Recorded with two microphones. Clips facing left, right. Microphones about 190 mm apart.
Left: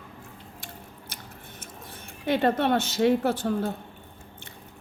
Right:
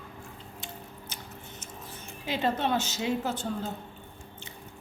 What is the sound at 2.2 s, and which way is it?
A woman's voice, 55° left (ahead or behind).